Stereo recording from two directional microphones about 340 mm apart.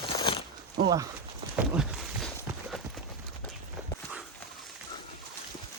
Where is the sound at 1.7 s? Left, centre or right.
Centre.